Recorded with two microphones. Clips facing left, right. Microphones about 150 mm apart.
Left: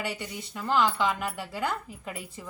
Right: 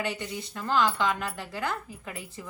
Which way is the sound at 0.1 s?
15° left (ahead or behind).